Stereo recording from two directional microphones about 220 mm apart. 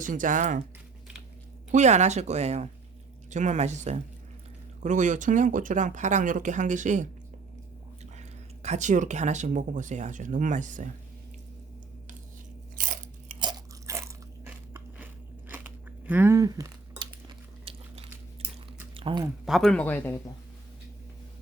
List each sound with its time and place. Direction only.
0.0 s speech: 35° right (ahead or behind)
1.7 s speech: 30° right (ahead or behind)
8.2 s speech: 30° right (ahead or behind)
12.7 s biting: 40° right (ahead or behind)
13.4 s crunch: 15° right (ahead or behind)
17.7 s biting: 25° right (ahead or behind)
18.9 s speech: 20° right (ahead or behind)
19.5 s speech: centre (ahead or behind)